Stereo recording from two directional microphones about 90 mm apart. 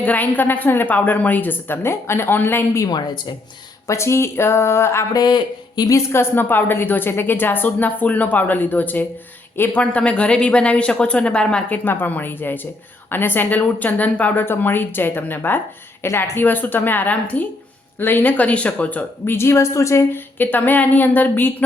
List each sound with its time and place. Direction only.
0.0 s speech: 20° left (ahead or behind)
3.8 s speech: 30° left (ahead or behind)
5.1 s speech: 50° left (ahead or behind)
5.9 s speech: 30° left (ahead or behind)